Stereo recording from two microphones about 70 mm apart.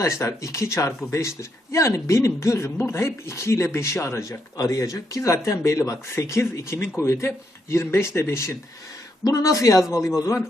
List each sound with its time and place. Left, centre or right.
0.0 s a man's voice: left
4.5 s a man's voice: left
9.2 s a man's voice: left